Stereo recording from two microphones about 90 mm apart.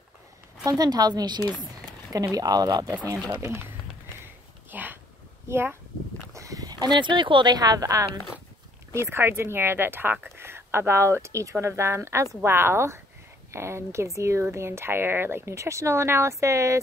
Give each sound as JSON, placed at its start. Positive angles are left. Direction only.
{"t": 0.7, "sound": "a woman's voice", "side_deg": -45}
{"t": 3.3, "sound": "speech", "side_deg": -30}
{"t": 4.2, "sound": "sniff", "side_deg": -20}
{"t": 5.5, "sound": "speech", "side_deg": -25}
{"t": 6.3, "sound": "a sound", "side_deg": -40}
{"t": 7.5, "sound": "a woman's voice", "side_deg": -45}
{"t": 8.9, "sound": "a woman's voice", "side_deg": -25}